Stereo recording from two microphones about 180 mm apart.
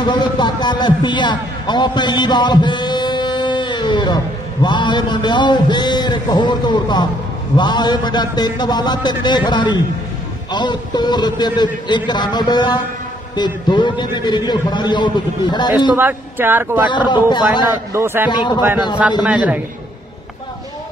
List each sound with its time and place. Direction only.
0.0 s a man's voice: 25° left (ahead or behind)
16.0 s speech: 10° right (ahead or behind)
16.8 s a man's voice: 25° left (ahead or behind)
17.9 s speech: 15° right (ahead or behind)
18.3 s a man's voice: 25° left (ahead or behind)
19.2 s speech: 5° right (ahead or behind)